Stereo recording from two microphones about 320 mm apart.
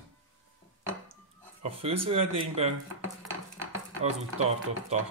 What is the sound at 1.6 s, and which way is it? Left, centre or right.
Speech, centre.